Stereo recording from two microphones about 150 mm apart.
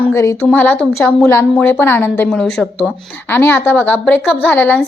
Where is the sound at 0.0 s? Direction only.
20° left (ahead or behind).